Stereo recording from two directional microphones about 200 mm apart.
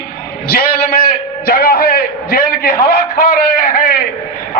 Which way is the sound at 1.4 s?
50° left (ahead or behind).